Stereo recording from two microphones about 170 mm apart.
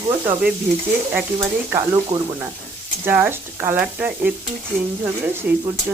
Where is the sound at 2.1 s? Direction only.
35° right (ahead or behind).